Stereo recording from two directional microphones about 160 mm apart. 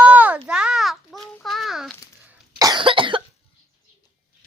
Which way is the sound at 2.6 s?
30° right (ahead or behind).